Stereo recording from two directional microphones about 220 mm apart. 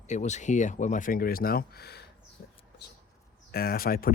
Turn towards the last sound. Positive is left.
turn(degrees=40)  # may be behind; listen again after turning